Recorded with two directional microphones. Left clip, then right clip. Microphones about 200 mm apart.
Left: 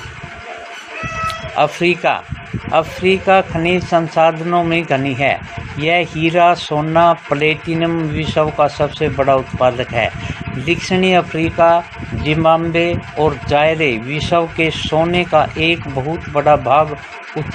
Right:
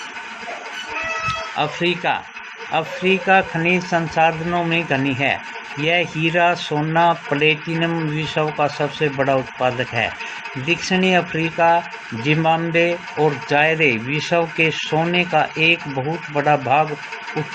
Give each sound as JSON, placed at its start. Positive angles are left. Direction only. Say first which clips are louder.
{"t": 1.5, "sound": "speech", "louder": "left 9 dB", "side_deg": 45}